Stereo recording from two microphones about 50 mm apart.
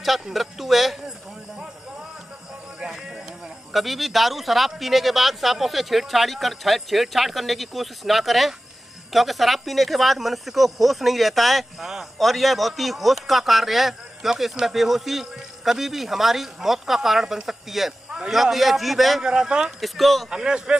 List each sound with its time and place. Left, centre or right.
0.0 s speech: centre
2.8 s a sound: centre
3.7 s speech: centre
19.2 s speech: centre
19.8 s speech: centre
20.2 s speech: centre